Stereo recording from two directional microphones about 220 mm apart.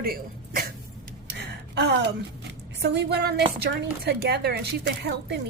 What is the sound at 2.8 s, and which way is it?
A woman's voice, 50° right (ahead or behind).